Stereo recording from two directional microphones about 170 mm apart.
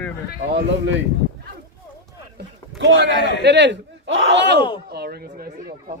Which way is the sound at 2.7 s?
90° right.